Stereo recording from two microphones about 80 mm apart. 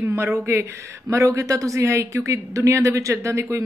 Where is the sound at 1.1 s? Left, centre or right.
Right.